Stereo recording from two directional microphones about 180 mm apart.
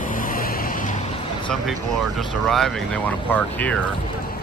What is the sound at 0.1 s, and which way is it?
Vehicle, 50° left (ahead or behind).